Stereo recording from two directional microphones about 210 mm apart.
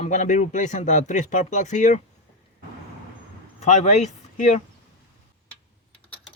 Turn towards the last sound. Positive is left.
turn(degrees=35)  # may be behind; listen again after turning